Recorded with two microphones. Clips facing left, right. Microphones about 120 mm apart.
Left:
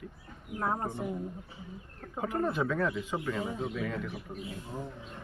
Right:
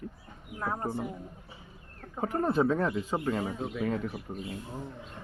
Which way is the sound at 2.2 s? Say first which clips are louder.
Right 3 dB; 35° right (ahead or behind).